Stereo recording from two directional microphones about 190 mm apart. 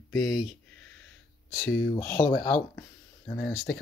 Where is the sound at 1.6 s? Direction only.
20° left (ahead or behind).